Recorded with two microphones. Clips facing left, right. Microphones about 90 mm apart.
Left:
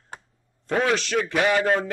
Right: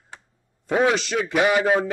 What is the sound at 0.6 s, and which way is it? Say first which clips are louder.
Speech: right 3 dB; 15° right (ahead or behind).